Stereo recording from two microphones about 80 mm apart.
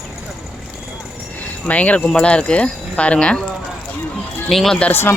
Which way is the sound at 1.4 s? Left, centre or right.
Centre.